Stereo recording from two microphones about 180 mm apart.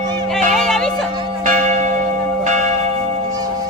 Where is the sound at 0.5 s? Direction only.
5° left (ahead or behind).